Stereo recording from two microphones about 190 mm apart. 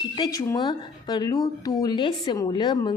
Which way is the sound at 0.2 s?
15° left (ahead or behind).